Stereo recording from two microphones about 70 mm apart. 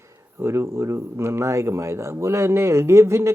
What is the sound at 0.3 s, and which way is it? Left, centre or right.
Rub, right.